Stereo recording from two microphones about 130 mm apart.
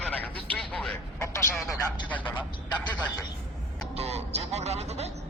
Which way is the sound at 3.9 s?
55° right (ahead or behind).